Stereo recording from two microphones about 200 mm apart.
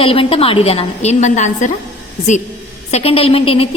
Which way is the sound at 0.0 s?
30° left (ahead or behind).